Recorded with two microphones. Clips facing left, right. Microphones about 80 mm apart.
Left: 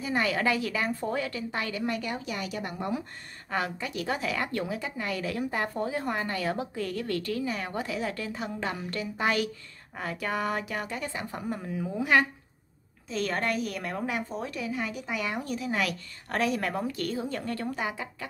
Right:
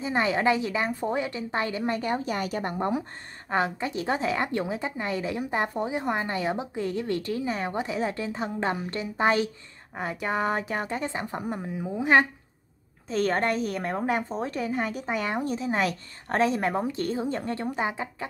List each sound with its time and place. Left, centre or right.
0.0 s a woman's voice: right
2.7 s a woman's voice: right
13.1 s a woman's voice: right